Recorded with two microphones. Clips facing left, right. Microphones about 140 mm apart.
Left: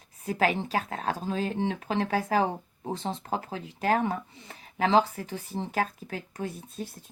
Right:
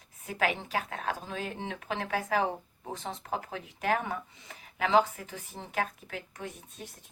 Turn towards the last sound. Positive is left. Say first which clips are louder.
# left 7 dB
turn(degrees=35)  # may be behind; listen again after turning